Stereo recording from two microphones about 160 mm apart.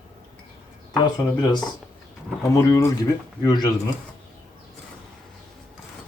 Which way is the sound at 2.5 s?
20° left (ahead or behind).